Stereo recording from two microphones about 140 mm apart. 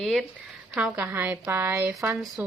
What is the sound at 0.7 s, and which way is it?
A woman's voice, 10° right (ahead or behind).